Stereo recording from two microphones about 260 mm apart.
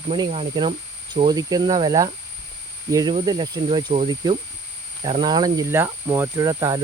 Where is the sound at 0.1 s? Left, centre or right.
Right.